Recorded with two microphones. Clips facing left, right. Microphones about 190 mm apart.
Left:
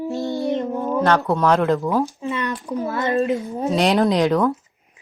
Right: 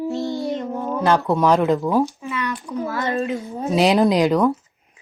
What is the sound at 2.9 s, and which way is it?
Speech, 20° left (ahead or behind).